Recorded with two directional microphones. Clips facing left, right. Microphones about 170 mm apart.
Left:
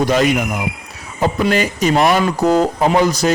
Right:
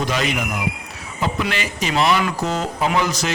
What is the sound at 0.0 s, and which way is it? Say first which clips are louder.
Speech: left 7 dB; 45° left (ahead or behind).